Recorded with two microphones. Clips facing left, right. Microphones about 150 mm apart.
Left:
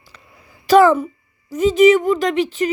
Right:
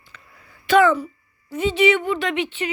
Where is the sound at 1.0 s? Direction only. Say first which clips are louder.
Left 5 dB; 40° left (ahead or behind).